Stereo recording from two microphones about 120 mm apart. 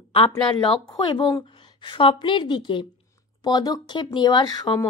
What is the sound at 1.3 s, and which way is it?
A woman's voice, 35° left (ahead or behind).